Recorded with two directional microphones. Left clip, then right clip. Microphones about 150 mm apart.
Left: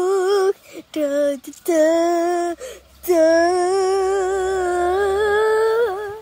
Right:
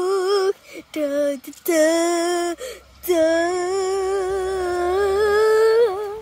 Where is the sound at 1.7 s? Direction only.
10° right (ahead or behind).